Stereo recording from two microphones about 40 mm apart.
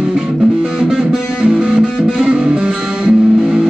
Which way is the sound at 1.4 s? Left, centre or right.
Centre.